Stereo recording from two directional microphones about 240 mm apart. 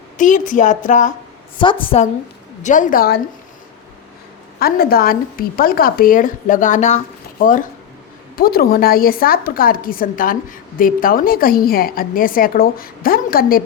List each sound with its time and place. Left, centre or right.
0.2 s a woman's voice: left
1.5 s a woman's voice: left
2.6 s a woman's voice: left
4.6 s a woman's voice: left